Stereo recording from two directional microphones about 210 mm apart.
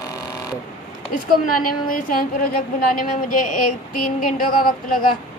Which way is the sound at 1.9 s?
40° left (ahead or behind).